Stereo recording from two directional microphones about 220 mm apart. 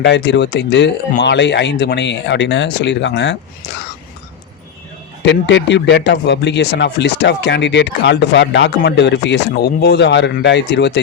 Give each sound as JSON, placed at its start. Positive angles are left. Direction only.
{"t": 0.0, "sound": "speech", "side_deg": 55}
{"t": 5.2, "sound": "speech", "side_deg": 55}